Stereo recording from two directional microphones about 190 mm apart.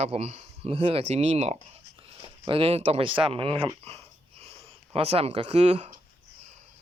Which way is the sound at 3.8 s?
30° right (ahead or behind).